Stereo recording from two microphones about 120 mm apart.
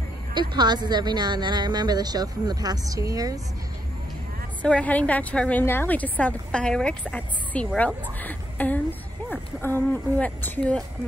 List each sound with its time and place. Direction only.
0.3 s speech: 40° right (ahead or behind)
4.6 s a woman's voice: 10° left (ahead or behind)